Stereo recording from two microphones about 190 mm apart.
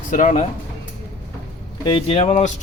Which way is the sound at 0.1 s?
40° left (ahead or behind).